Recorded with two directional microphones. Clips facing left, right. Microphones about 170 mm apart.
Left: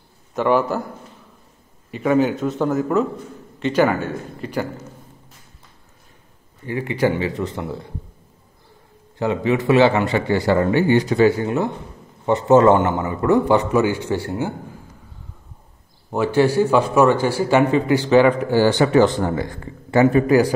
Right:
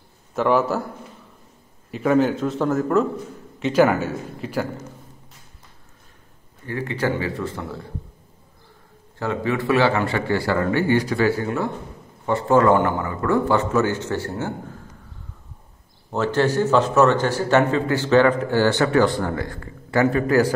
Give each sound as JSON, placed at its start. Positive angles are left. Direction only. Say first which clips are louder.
{"t": 0.3, "sound": "a man's voice", "louder": "left 1 dB", "side_deg": 0}
{"t": 1.9, "sound": "a man's voice", "louder": "left 1 dB", "side_deg": 0}
{"t": 6.6, "sound": "speech", "louder": "left 4 dB", "side_deg": 15}
{"t": 9.2, "sound": "a man's voice", "louder": "left 4 dB", "side_deg": 20}
{"t": 16.1, "sound": "speech", "louder": "left 3 dB", "side_deg": 10}